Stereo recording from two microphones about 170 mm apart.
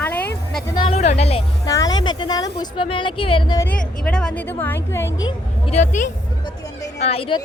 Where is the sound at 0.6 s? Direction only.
25° left (ahead or behind).